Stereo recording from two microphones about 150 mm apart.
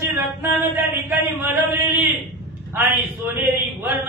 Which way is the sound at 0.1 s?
15° right (ahead or behind).